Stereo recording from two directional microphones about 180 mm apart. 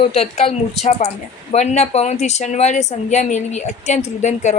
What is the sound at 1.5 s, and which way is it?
Speech, 40° left (ahead or behind).